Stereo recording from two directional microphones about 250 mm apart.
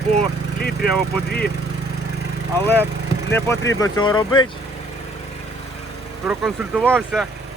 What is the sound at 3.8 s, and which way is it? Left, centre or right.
Speech, centre.